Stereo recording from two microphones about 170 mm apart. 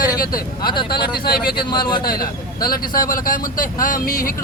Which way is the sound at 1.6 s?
25° left (ahead or behind).